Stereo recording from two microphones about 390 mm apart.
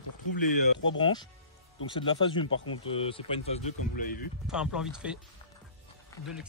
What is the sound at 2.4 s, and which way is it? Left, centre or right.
Speech, left.